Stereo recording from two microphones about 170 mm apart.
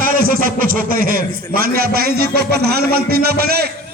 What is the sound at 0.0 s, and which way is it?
A man's voice, 55° right (ahead or behind).